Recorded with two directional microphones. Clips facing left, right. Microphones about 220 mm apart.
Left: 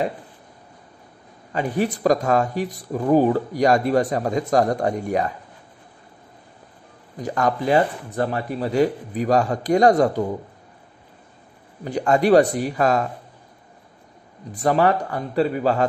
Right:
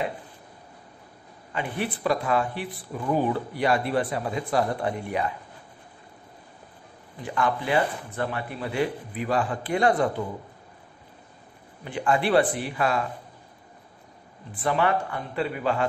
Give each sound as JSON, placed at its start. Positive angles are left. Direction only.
{"t": 1.5, "sound": "speech", "side_deg": 40}
{"t": 7.2, "sound": "speech", "side_deg": 40}
{"t": 11.8, "sound": "speech", "side_deg": 40}
{"t": 14.5, "sound": "speech", "side_deg": 40}